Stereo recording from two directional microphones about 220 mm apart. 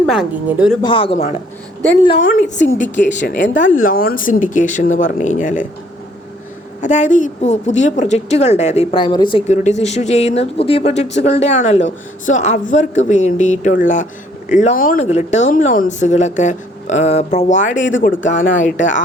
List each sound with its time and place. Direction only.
0.0 s speech: centre (ahead or behind)
0.8 s speech: 25° left (ahead or behind)
6.8 s speech: 35° left (ahead or behind)
17.7 s speech: 60° left (ahead or behind)
18.3 s speech: 35° left (ahead or behind)